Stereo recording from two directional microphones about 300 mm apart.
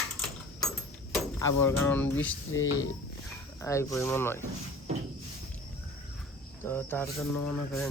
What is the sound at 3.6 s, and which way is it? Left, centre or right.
Speech, centre.